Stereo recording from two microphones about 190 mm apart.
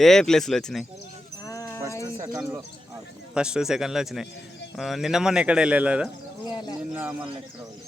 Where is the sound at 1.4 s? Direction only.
15° left (ahead or behind).